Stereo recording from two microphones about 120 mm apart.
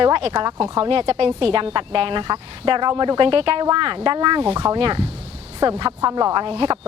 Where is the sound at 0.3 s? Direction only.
35° right (ahead or behind).